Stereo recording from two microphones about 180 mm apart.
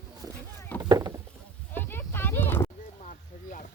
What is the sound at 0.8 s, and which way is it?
Rowboat, 20° right (ahead or behind).